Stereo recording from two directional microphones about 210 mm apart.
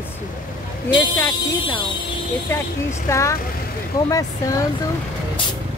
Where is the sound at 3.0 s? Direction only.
15° left (ahead or behind).